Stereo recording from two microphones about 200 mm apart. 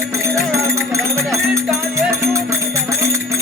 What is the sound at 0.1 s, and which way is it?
Music, 15° right (ahead or behind).